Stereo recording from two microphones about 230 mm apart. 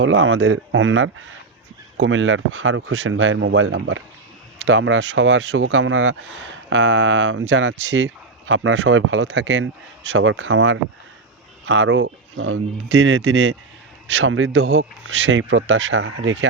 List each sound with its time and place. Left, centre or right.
0.0 s speech: right